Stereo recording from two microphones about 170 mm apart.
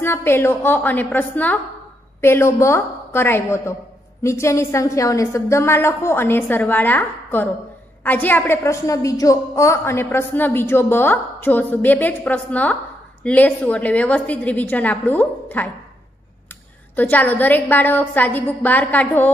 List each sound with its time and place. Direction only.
0.0 s a woman's voice: 15° left (ahead or behind)
16.9 s a woman's voice: 10° left (ahead or behind)